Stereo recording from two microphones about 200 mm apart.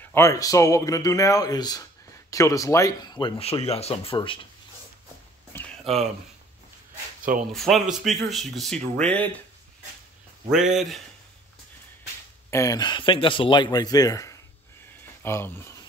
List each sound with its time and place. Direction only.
0.1 s speech: 15° left (ahead or behind)
5.5 s a sound: 10° left (ahead or behind)
7.5 s speech: centre (ahead or behind)
10.7 s speech: centre (ahead or behind)
12.4 s speech: 15° left (ahead or behind)